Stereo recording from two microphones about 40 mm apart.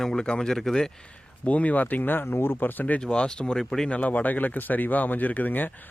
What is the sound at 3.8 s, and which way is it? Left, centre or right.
Speech, left.